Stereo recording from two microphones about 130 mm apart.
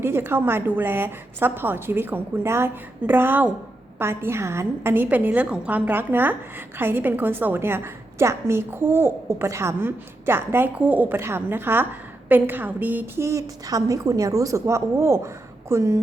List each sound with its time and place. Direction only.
0.0 s a woman's voice: 15° right (ahead or behind)